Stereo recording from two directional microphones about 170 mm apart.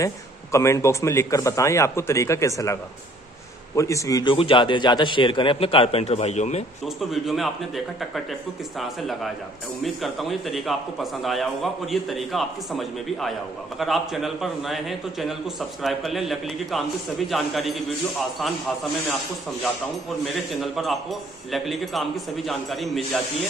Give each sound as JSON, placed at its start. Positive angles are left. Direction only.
{"t": 0.0, "sound": "a man's voice", "side_deg": 15}
{"t": 7.0, "sound": "a man's voice", "side_deg": 0}
{"t": 20.6, "sound": "a man's voice", "side_deg": 0}